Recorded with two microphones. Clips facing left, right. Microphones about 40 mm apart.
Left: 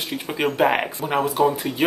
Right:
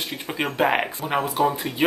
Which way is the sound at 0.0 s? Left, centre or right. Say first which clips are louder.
Left 3 dB; centre.